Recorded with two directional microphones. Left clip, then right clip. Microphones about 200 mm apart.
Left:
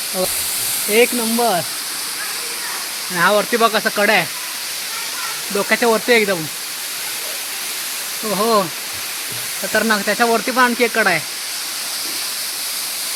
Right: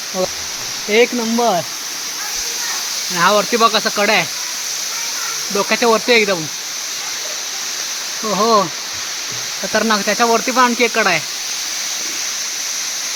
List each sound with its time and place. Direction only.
0.9 s speech: 10° right (ahead or behind)
3.2 s speech: centre (ahead or behind)
5.5 s speech: 5° right (ahead or behind)
8.3 s speech: 5° right (ahead or behind)
9.7 s speech: 5° right (ahead or behind)